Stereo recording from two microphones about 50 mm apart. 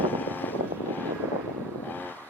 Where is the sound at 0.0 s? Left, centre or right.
Left.